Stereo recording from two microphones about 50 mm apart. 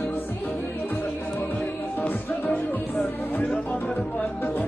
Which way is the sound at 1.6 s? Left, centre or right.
Left.